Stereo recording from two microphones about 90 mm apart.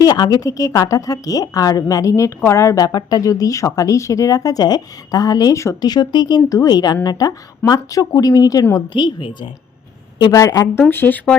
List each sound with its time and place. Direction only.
0.0 s speech: 45° left (ahead or behind)
5.8 s a woman's voice: 50° left (ahead or behind)
8.9 s a woman's voice: 65° left (ahead or behind)
10.2 s a woman's voice: 45° left (ahead or behind)
10.8 s speech: 20° left (ahead or behind)